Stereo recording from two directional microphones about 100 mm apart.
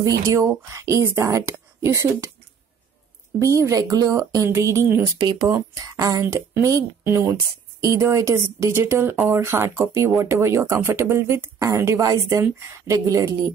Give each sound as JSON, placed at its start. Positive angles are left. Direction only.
{"t": 0.0, "sound": "speech", "side_deg": -35}
{"t": 3.3, "sound": "speech", "side_deg": -30}
{"t": 5.2, "sound": "speech", "side_deg": -40}